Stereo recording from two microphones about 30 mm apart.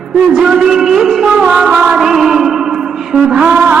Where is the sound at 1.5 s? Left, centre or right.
Right.